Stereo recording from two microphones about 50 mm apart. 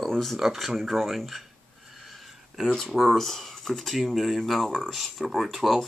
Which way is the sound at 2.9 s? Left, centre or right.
Centre.